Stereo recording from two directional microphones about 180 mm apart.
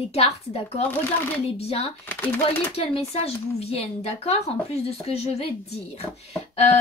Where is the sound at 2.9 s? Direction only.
35° left (ahead or behind).